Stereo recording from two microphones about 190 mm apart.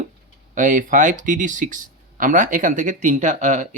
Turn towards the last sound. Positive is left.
turn(degrees=-40)  # may be behind; listen again after turning